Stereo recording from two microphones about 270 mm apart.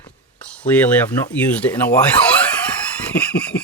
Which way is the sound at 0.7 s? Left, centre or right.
Centre.